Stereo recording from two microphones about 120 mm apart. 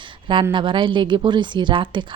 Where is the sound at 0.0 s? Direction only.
45° right (ahead or behind).